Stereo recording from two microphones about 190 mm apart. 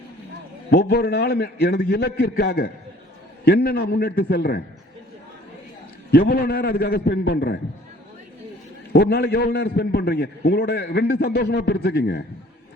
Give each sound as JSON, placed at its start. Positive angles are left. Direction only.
{"t": 0.7, "sound": "a man's voice", "side_deg": 55}
{"t": 6.1, "sound": "a man's voice", "side_deg": 55}
{"t": 8.9, "sound": "a man's voice", "side_deg": 55}